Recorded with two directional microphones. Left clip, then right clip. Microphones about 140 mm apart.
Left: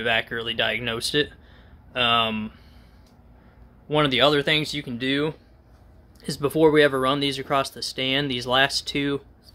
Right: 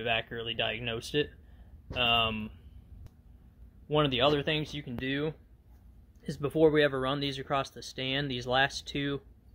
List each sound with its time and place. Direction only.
0.0 s speech: 10° left (ahead or behind)
3.9 s speech: 10° left (ahead or behind)